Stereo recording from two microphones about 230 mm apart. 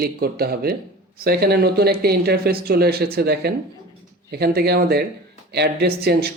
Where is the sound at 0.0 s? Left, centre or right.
Right.